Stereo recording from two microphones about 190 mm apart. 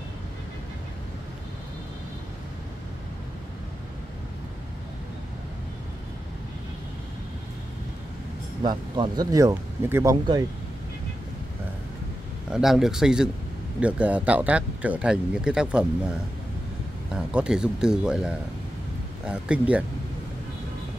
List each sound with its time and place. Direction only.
8.6 s speech: 25° right (ahead or behind)
12.4 s speech: 5° right (ahead or behind)